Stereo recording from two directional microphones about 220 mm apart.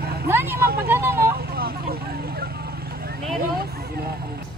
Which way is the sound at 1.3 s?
45° right (ahead or behind).